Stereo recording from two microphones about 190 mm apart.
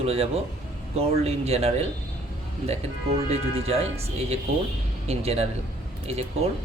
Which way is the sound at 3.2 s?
35° right (ahead or behind).